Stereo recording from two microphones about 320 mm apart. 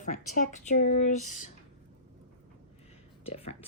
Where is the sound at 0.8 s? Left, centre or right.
Left.